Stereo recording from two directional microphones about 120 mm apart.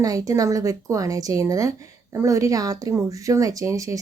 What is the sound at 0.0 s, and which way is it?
A woman's voice, 30° right (ahead or behind).